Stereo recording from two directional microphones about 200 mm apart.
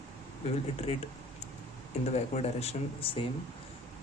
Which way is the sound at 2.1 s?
30° left (ahead or behind).